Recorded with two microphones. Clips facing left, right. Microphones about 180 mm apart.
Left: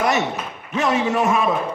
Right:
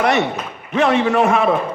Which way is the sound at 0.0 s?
60° right (ahead or behind).